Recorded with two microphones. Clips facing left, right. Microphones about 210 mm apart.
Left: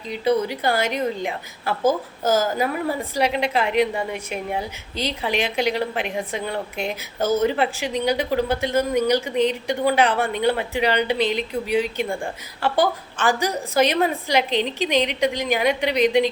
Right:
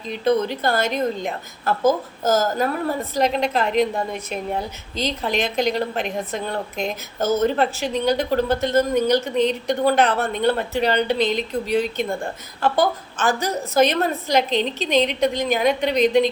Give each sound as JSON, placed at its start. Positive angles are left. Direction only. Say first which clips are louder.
{"t": 0.1, "sound": "a woman's voice", "louder": "right 1 dB", "side_deg": 10}